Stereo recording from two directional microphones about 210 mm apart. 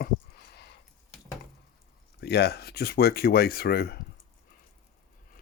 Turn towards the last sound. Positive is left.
turn(degrees=50)  # may be behind; listen again after turning